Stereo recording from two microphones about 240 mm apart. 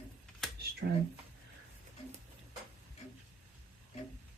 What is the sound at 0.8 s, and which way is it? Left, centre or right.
Speech, right.